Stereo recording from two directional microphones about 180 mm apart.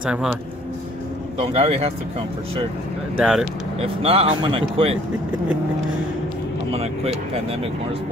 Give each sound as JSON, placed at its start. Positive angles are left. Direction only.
{"t": 0.0, "sound": "speech", "side_deg": -5}
{"t": 1.4, "sound": "speech", "side_deg": -35}
{"t": 3.2, "sound": "speech", "side_deg": -5}
{"t": 3.8, "sound": "speech", "side_deg": -30}
{"t": 6.7, "sound": "speech", "side_deg": -35}